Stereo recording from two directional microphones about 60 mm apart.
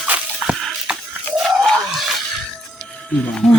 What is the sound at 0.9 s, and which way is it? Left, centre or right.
Rattle, centre.